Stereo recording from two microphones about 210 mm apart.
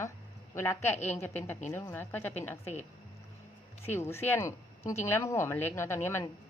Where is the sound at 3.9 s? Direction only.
10° left (ahead or behind).